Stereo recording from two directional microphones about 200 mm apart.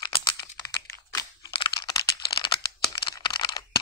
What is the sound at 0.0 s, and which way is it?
Computer keyboard, 25° left (ahead or behind).